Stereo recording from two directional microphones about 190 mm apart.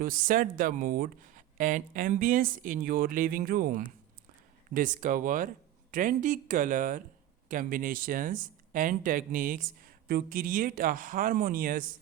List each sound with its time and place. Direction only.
0.0 s speech: 45° right (ahead or behind)